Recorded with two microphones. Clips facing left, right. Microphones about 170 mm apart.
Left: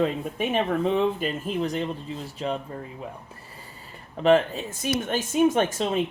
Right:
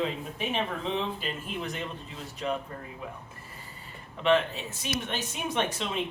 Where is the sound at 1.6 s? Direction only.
35° left (ahead or behind).